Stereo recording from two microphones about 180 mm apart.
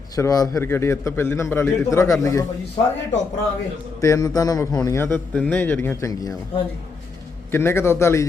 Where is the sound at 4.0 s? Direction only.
20° left (ahead or behind).